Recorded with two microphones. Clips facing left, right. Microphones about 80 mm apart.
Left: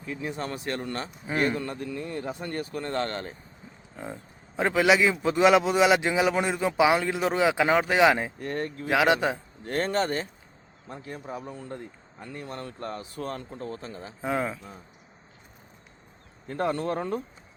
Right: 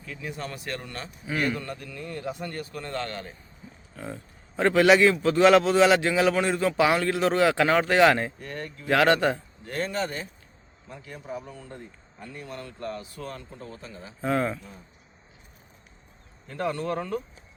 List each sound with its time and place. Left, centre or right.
0.0 s a man's voice: left
3.9 s a man's voice: centre
8.4 s a man's voice: left
8.9 s a man's voice: centre
9.6 s a man's voice: left
14.2 s a man's voice: centre
16.5 s a man's voice: left